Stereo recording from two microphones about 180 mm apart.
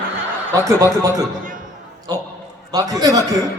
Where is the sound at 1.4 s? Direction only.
50° right (ahead or behind).